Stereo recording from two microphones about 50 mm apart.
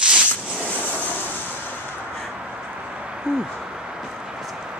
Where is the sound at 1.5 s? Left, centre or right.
Right.